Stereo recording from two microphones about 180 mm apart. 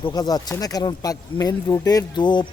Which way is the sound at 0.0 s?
20° left (ahead or behind).